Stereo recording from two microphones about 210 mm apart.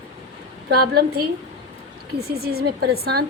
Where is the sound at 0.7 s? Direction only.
50° right (ahead or behind).